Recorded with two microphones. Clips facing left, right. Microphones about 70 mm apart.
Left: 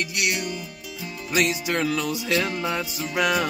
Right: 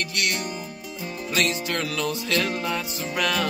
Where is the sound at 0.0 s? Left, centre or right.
Centre.